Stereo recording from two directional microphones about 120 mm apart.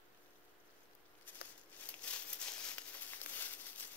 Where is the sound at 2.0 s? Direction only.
10° left (ahead or behind).